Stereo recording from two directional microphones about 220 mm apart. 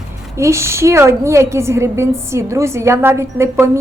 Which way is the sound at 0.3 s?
10° right (ahead or behind).